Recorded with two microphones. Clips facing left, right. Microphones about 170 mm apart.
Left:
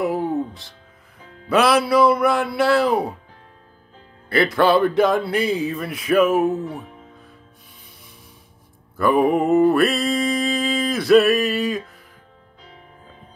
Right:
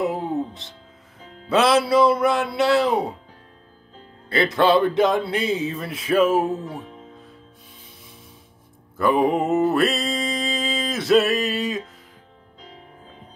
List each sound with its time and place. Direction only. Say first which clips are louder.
0.0 s music: left 2 dB; 20° right (ahead or behind)
1.5 s speech: left 1 dB; 25° right (ahead or behind)
4.3 s speech: left 1 dB; 25° right (ahead or behind)
8.9 s mantra: left 2 dB; 25° right (ahead or behind)